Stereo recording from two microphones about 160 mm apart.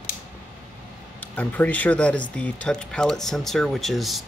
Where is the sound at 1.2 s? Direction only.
10° left (ahead or behind).